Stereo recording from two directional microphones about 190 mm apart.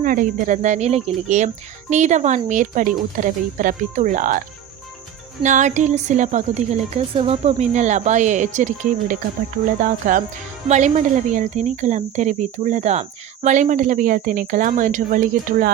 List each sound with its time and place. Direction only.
0.0 s speech: 45° right (ahead or behind)